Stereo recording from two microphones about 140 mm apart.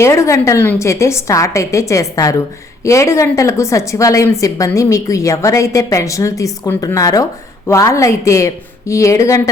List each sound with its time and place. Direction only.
0.0 s a woman's voice: 20° left (ahead or behind)